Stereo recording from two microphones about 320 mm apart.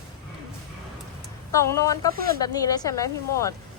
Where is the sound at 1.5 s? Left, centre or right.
Centre.